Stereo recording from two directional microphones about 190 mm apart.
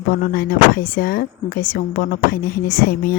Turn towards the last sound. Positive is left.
turn(degrees=50)  # may be behind; listen again after turning